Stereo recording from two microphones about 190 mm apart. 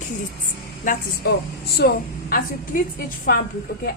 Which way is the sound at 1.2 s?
60° left (ahead or behind).